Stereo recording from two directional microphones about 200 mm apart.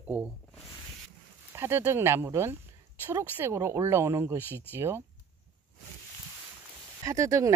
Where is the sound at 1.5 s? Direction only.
10° right (ahead or behind).